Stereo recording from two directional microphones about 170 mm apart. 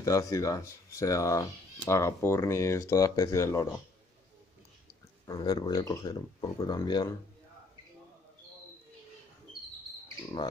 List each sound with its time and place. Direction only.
0.0 s speech: 20° left (ahead or behind)
5.2 s speech: 20° left (ahead or behind)